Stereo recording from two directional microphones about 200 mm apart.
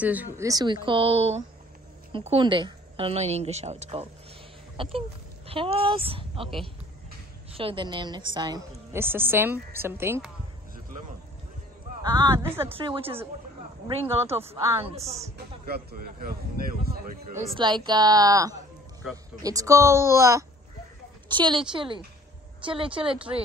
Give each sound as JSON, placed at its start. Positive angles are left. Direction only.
{"t": 0.0, "sound": "a woman's voice", "side_deg": -10}
{"t": 7.5, "sound": "a woman's voice", "side_deg": -25}
{"t": 12.0, "sound": "a woman's voice", "side_deg": -20}
{"t": 12.7, "sound": "a woman's voice", "side_deg": -25}
{"t": 14.5, "sound": "a woman's voice", "side_deg": -15}
{"t": 14.9, "sound": "a woman's voice", "side_deg": -30}
{"t": 15.3, "sound": "speech", "side_deg": -50}
{"t": 17.6, "sound": "a woman's voice", "side_deg": -20}